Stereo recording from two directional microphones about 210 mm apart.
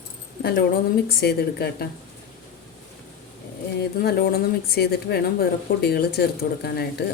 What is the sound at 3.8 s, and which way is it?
A woman's voice, 50° left (ahead or behind).